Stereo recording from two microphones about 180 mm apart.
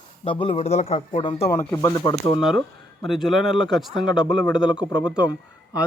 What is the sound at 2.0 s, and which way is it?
Speech, 25° left (ahead or behind).